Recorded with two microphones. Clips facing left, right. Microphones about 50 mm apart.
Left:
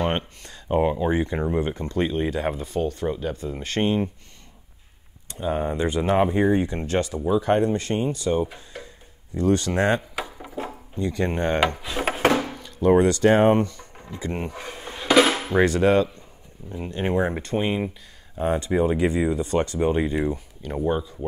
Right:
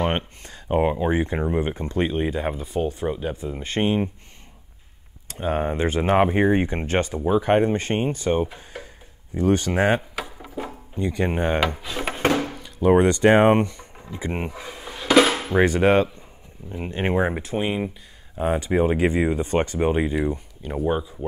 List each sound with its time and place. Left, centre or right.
0.0 s a sound: centre
1.5 s speech: centre
5.4 s speech: right
8.7 s a sound: centre
9.3 s speech: right
10.1 s drawer open or close: centre
11.0 s speech: centre
11.7 s drawer open or close: centre
12.6 s a sound: centre
12.9 s speech: right
14.5 s dishes: centre
15.6 s speech: right
17.3 s speech: centre
18.4 s speech: centre